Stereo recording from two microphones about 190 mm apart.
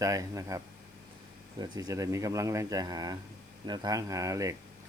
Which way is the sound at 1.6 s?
20° right (ahead or behind).